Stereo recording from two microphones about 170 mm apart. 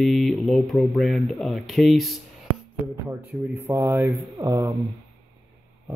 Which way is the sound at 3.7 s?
15° right (ahead or behind).